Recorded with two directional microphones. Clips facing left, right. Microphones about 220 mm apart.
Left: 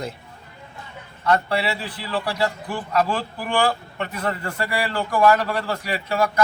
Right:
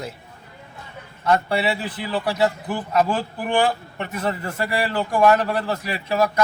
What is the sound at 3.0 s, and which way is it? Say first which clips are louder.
A man's voice: right 1 dB; 20° right (ahead or behind).